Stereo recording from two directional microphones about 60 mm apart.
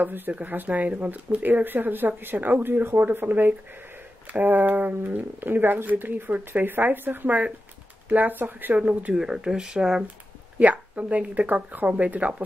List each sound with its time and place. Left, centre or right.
0.0 s speech: right
9.1 s speech: centre
10.6 s speech: right